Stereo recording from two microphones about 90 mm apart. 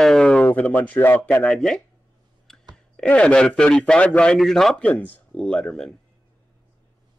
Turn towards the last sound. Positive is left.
turn(degrees=5)  # may be behind; listen again after turning